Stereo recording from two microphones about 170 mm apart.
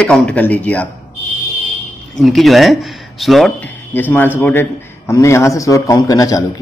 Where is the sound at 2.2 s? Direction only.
Centre (ahead or behind).